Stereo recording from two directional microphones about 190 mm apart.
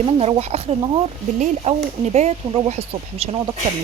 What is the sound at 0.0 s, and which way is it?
Speech, 30° right (ahead or behind).